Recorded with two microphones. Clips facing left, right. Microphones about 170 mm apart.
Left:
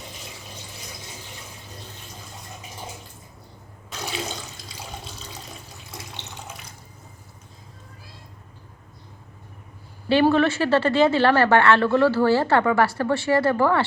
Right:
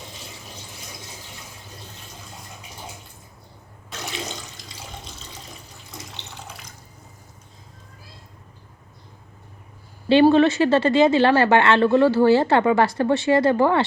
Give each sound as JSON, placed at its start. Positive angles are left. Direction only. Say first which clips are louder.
{"t": 10.1, "sound": "speech", "louder": "right 4 dB", "side_deg": -20}